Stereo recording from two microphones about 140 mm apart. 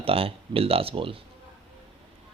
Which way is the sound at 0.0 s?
40° right (ahead or behind).